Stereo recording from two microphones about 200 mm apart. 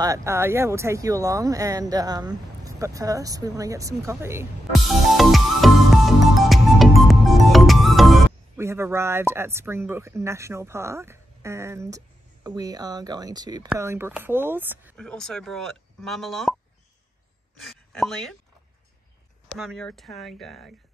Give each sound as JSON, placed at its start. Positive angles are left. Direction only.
{"t": 0.0, "sound": "speech", "side_deg": -15}
{"t": 4.7, "sound": "music", "side_deg": 0}
{"t": 8.5, "sound": "speech", "side_deg": -15}
{"t": 15.0, "sound": "speech", "side_deg": 5}
{"t": 17.6, "sound": "speech", "side_deg": 0}
{"t": 19.5, "sound": "speech", "side_deg": 0}